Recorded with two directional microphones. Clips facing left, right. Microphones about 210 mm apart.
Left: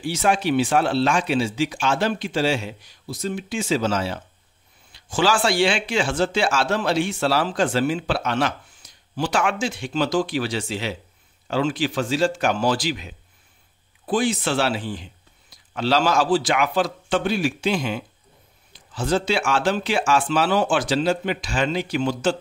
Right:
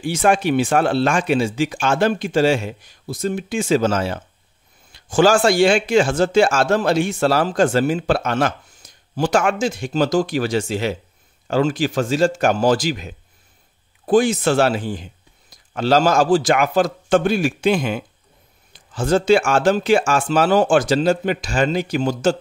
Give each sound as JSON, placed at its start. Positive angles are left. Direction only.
{"t": 0.0, "sound": "speech", "side_deg": -50}